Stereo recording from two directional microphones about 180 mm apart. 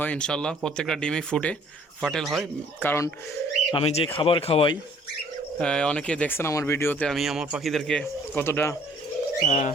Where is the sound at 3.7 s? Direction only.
30° left (ahead or behind).